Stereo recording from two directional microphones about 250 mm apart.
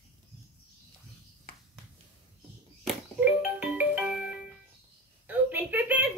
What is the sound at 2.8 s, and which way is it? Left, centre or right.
Music, centre.